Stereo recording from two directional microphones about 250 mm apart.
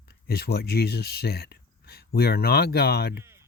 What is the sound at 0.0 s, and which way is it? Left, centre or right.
Speech, left.